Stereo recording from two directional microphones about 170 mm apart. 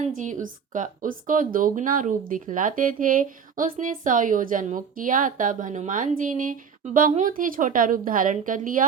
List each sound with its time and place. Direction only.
0.0 s a woman's voice: 45° right (ahead or behind)